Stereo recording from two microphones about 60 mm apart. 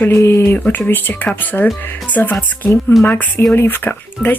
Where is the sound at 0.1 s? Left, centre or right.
Left.